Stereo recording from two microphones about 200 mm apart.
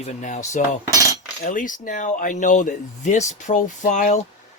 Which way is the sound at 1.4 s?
40° left (ahead or behind).